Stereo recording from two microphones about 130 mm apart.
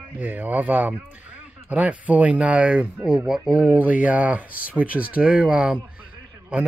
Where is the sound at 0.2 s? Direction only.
15° right (ahead or behind).